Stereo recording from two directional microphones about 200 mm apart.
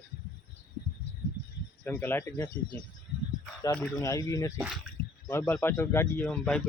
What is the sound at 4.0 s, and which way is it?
Speech, 15° left (ahead or behind).